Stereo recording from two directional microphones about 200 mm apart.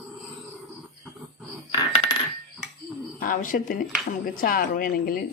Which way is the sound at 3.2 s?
40° left (ahead or behind).